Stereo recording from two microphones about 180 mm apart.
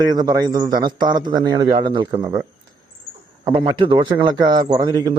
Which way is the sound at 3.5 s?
30° right (ahead or behind).